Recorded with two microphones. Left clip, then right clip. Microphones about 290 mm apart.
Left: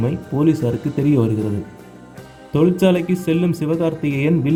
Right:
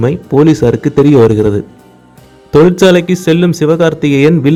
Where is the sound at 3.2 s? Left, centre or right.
Right.